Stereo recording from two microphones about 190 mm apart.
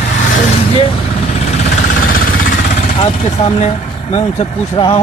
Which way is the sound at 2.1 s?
50° left (ahead or behind).